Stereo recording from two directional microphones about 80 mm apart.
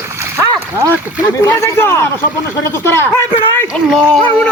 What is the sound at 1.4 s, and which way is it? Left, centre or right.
A man's voice, left.